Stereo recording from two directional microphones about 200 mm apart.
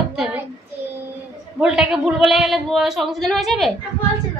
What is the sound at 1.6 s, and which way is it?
A woman's voice, 5° right (ahead or behind).